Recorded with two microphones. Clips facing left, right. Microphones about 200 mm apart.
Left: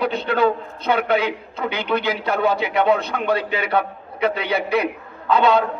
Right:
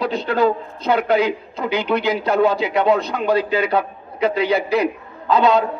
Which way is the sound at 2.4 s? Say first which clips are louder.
Right 2 dB; 30° right (ahead or behind).